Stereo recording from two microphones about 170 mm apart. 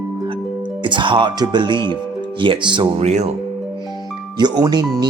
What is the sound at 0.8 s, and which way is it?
Speech, 30° right (ahead or behind).